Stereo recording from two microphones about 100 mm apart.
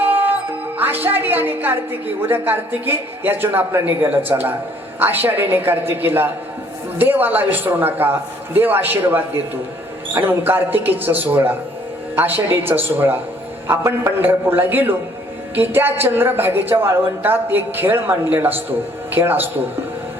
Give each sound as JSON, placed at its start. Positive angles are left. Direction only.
{"t": 0.0, "sound": "music", "side_deg": -20}
{"t": 0.8, "sound": "a woman's voice", "side_deg": -20}